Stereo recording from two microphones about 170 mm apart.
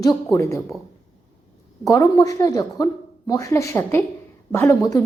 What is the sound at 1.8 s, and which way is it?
A woman's voice, 20° left (ahead or behind).